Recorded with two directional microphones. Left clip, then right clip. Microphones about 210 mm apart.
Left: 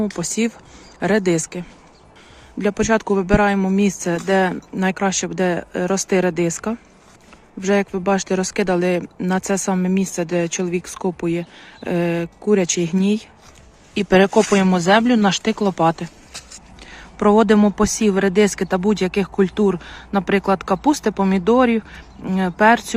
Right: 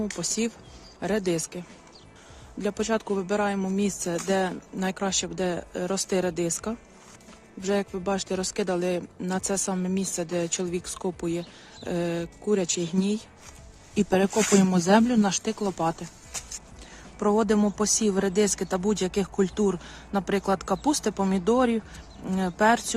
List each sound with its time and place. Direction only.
0.2 s speech: 15° left (ahead or behind)
14.3 s speech: centre (ahead or behind)
14.5 s speech: 15° left (ahead or behind)
17.2 s speech: 15° left (ahead or behind)